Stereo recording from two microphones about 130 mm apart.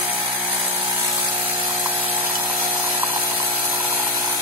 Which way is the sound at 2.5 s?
10° right (ahead or behind).